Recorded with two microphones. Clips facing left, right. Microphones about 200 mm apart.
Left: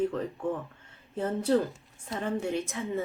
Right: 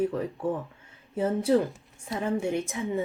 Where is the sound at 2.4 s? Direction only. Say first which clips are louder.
Right 2 dB; 25° right (ahead or behind).